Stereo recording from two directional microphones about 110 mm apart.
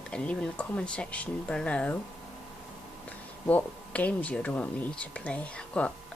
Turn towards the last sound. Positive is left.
turn(degrees=10)  # may be behind; listen again after turning